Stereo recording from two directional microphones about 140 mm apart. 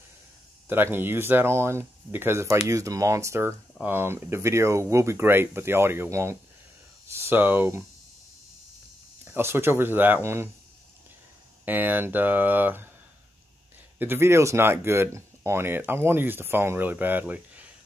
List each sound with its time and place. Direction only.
0.7 s speech: 15° right (ahead or behind)
9.2 s speech: 15° right (ahead or behind)
11.6 s speech: 15° right (ahead or behind)
13.9 s speech: 15° right (ahead or behind)